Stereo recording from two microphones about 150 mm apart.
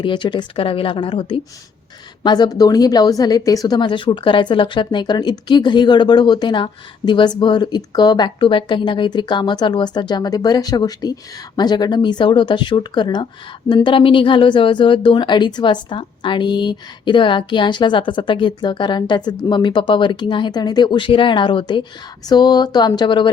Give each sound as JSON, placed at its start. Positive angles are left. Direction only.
{"t": 0.0, "sound": "a woman's voice", "side_deg": 30}